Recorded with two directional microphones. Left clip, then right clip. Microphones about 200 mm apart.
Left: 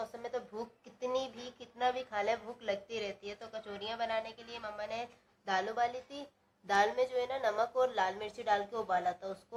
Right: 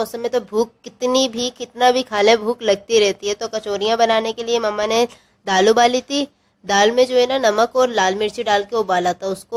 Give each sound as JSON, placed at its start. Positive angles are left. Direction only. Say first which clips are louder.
{"t": 0.0, "sound": "a child's voice", "louder": "right 19 dB", "side_deg": -45}